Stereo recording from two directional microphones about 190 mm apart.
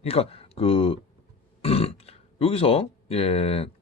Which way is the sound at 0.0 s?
30° left (ahead or behind).